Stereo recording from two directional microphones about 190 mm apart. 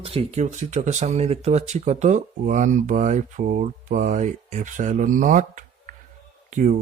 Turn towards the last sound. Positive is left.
turn(degrees=-40)  # may be behind; listen again after turning